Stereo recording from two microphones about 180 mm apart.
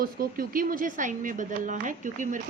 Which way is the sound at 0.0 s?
55° right (ahead or behind).